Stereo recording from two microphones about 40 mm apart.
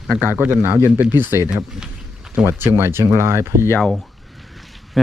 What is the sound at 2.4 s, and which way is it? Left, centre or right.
Speech, right.